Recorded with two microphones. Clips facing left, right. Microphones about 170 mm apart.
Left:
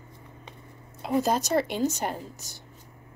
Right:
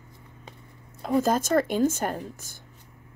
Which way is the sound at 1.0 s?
45° right (ahead or behind).